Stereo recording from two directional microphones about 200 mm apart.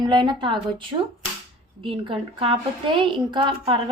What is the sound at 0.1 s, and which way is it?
A woman's voice, 25° right (ahead or behind).